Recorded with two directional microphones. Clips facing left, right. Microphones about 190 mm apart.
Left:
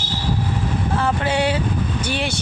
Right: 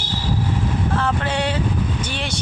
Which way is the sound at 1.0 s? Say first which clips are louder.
Left 5 dB; 10° left (ahead or behind).